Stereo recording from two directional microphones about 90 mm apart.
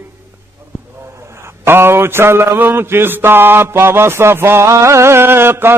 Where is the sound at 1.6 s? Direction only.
25° right (ahead or behind).